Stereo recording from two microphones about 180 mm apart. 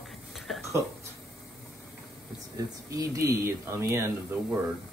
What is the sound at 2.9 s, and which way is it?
Speech, 20° right (ahead or behind).